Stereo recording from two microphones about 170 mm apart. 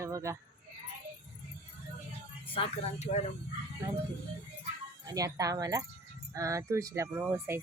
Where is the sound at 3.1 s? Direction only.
45° left (ahead or behind).